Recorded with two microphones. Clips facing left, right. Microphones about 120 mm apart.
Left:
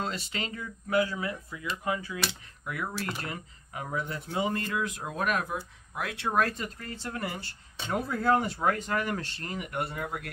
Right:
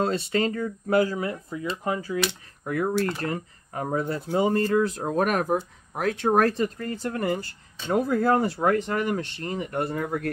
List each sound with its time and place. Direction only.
0.0 s speech: 40° right (ahead or behind)
6.6 s speech: 30° right (ahead or behind)
9.8 s speech: 45° right (ahead or behind)